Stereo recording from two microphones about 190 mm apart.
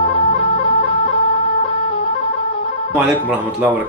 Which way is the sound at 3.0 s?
5° right (ahead or behind).